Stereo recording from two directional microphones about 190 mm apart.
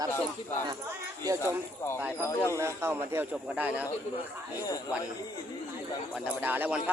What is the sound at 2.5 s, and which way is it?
Speech, 15° right (ahead or behind).